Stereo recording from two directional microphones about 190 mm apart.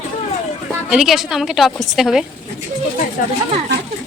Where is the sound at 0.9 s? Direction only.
Centre (ahead or behind).